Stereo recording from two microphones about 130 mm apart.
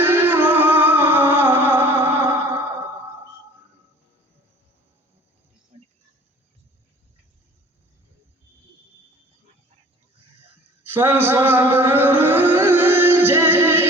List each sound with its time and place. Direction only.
0.0 s music: 15° right (ahead or behind)
5.7 s a sound: 55° right (ahead or behind)
10.8 s music: 15° right (ahead or behind)